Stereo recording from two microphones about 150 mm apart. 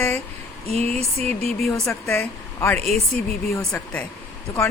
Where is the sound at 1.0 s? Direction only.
45° right (ahead or behind).